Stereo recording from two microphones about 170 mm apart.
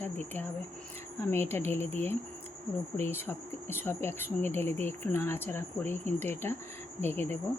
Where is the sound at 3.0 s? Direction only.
15° left (ahead or behind).